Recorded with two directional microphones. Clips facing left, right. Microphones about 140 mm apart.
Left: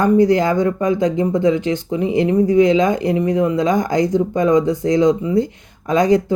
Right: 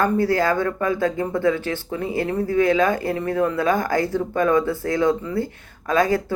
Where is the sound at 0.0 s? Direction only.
20° left (ahead or behind).